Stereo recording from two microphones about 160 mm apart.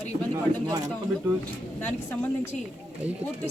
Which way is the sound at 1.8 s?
10° left (ahead or behind).